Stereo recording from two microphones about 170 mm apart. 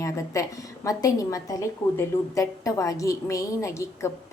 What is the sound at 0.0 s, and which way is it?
A woman's voice, 20° left (ahead or behind).